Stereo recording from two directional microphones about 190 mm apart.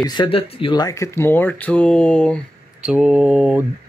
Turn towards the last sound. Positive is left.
turn(degrees=-5)  # may be behind; listen again after turning